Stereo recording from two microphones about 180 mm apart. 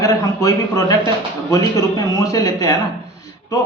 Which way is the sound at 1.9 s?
20° left (ahead or behind).